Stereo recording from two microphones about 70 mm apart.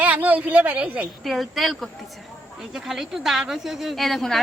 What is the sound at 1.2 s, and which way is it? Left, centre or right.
A woman's voice, centre.